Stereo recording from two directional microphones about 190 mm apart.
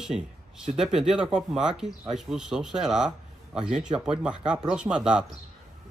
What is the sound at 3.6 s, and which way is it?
Speech, 35° right (ahead or behind).